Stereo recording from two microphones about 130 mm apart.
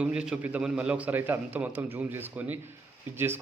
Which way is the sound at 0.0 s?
10° right (ahead or behind).